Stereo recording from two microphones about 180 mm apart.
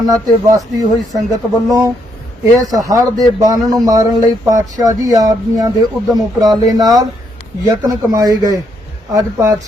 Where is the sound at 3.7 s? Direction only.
20° right (ahead or behind).